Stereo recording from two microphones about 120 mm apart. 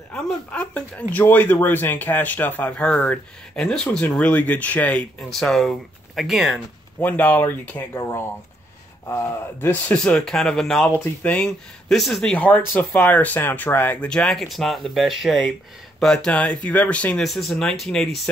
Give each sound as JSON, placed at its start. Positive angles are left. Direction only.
{"t": 0.1, "sound": "speech", "side_deg": 10}
{"t": 5.3, "sound": "speech", "side_deg": 0}
{"t": 7.0, "sound": "speech", "side_deg": 15}
{"t": 17.3, "sound": "speech", "side_deg": 0}